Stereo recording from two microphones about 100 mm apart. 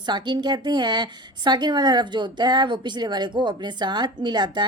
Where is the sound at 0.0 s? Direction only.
50° right (ahead or behind).